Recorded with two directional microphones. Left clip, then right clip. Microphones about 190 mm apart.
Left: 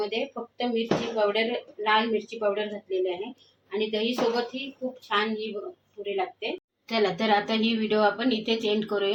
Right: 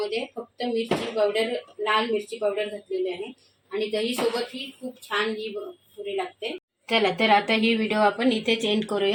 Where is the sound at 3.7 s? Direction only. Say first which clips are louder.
Right 1 dB; 5° left (ahead or behind).